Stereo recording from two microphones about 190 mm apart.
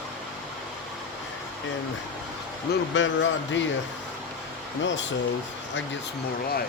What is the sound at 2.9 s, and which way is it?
Speech, 75° left (ahead or behind).